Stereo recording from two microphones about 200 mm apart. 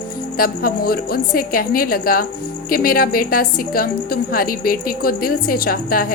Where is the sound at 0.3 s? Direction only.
45° left (ahead or behind).